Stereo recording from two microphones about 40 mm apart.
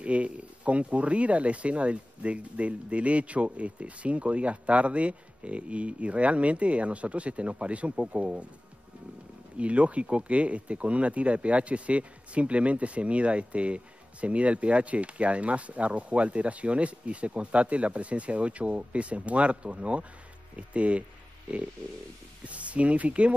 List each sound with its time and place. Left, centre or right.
0.0 s speech: right
9.6 s speech: right